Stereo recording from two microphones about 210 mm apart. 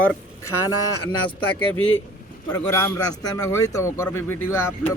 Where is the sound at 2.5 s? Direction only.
15° left (ahead or behind).